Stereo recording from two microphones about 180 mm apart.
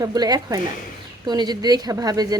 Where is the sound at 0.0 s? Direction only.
20° right (ahead or behind).